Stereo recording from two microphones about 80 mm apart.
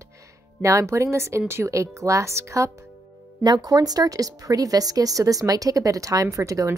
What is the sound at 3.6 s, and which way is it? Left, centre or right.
A woman's voice, right.